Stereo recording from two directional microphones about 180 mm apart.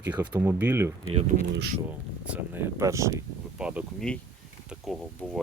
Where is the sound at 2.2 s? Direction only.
10° right (ahead or behind).